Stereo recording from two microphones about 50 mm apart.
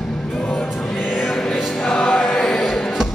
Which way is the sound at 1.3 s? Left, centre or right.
Centre.